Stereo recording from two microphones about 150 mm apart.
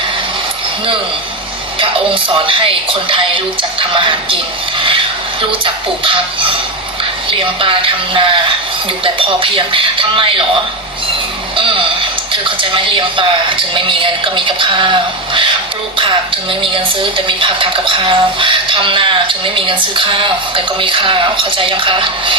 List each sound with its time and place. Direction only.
1.8 s speech: 35° right (ahead or behind)
11.5 s a sound: 35° right (ahead or behind)
12.3 s speech: 35° right (ahead or behind)